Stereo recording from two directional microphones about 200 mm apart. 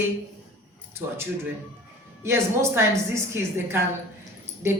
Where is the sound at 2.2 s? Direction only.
10° right (ahead or behind).